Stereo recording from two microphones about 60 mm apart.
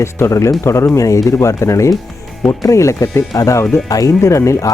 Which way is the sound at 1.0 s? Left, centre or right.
Left.